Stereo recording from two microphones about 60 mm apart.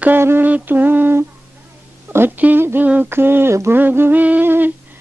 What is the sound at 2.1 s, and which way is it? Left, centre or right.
Speech, right.